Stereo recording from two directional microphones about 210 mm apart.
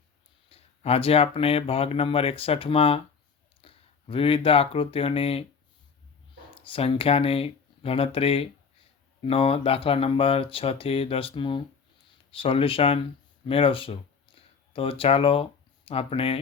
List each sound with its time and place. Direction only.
0.5 s speech: 30° left (ahead or behind)
6.5 s speech: 25° left (ahead or behind)